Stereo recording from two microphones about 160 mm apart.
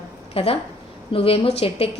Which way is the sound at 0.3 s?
35° left (ahead or behind).